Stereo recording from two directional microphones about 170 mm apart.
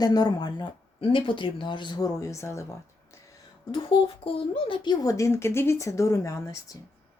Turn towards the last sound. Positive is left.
turn(degrees=20)  # may be behind; listen again after turning